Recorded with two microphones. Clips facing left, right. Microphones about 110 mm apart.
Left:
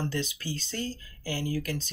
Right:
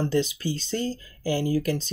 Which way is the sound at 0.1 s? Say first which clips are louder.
Right 8 dB; 20° right (ahead or behind).